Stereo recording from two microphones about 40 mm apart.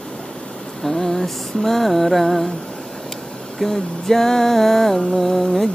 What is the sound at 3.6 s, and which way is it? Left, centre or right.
Music, centre.